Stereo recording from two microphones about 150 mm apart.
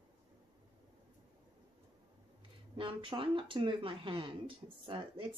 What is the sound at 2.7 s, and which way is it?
Speech, 35° right (ahead or behind).